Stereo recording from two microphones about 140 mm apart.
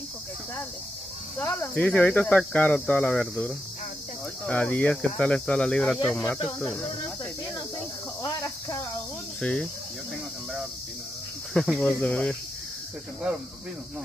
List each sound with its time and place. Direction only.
1.4 s speech: 10° left (ahead or behind)
8.2 s cricket: 25° left (ahead or behind)
9.4 s speech: 5° left (ahead or behind)
11.5 s speech: 5° left (ahead or behind)